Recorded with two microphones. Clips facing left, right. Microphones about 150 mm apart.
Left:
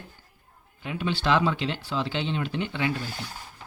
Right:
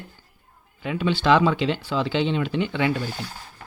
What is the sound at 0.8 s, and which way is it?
Speech, 90° right.